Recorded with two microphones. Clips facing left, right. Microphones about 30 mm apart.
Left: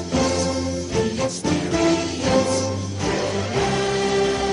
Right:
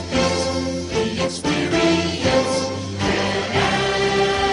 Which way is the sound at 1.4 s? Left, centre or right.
Right.